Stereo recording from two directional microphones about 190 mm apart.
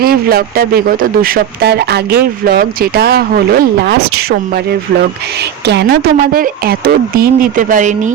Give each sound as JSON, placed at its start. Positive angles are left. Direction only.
{"t": 0.0, "sound": "speech", "side_deg": -55}
{"t": 5.6, "sound": "speech", "side_deg": -60}